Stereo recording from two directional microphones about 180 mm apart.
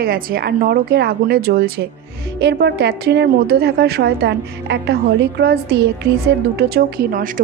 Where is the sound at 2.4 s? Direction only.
70° right (ahead or behind).